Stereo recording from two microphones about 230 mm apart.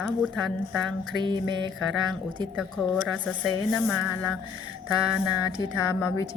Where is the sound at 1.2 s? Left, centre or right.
Centre.